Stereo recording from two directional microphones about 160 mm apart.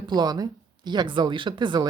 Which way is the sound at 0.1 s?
25° right (ahead or behind).